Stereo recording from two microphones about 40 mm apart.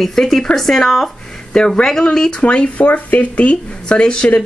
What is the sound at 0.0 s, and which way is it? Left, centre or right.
Speech, centre.